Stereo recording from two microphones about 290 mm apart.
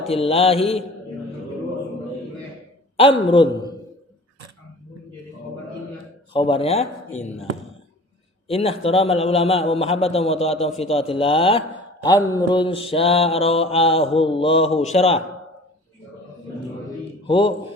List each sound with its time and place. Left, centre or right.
0.1 s a man's voice: centre
3.2 s a man's voice: centre
6.3 s a man's voice: centre
8.4 s a man's voice: centre
17.2 s speech: centre